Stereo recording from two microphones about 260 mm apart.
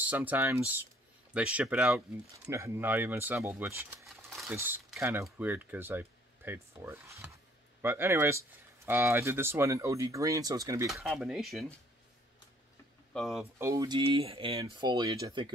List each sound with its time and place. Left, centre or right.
0.0 s speech: centre
10.9 s speech: centre
13.1 s speech: centre